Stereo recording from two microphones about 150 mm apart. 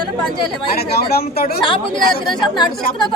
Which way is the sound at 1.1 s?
90° left.